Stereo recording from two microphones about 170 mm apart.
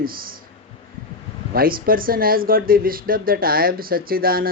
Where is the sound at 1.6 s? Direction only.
60° right (ahead or behind).